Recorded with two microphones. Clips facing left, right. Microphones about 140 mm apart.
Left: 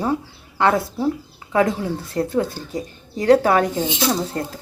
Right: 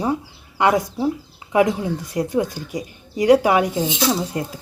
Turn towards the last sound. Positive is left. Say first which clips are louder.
# even
turn(degrees=-10)  # may be behind; listen again after turning